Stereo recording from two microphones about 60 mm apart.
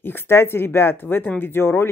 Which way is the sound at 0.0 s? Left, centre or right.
Left.